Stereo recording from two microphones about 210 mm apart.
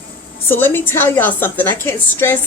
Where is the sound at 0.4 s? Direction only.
10° left (ahead or behind).